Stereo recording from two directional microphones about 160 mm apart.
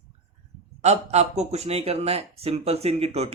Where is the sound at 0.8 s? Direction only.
45° right (ahead or behind).